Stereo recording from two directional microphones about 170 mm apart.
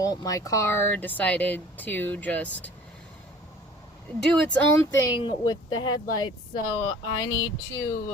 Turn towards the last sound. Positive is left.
turn(degrees=20)  # may be behind; listen again after turning